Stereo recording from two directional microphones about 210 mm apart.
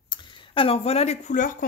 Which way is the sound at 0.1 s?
25° left (ahead or behind).